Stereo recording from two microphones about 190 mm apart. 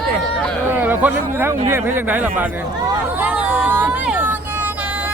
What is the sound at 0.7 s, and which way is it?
Speech, 10° right (ahead or behind).